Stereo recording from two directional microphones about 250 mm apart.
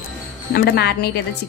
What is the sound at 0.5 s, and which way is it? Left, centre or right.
Speech, left.